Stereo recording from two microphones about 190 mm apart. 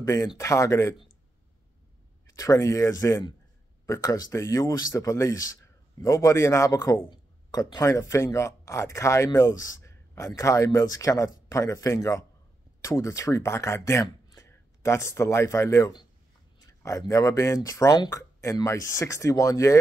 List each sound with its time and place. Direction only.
0.0 s speech: 15° left (ahead or behind)
2.2 s speech: 15° left (ahead or behind)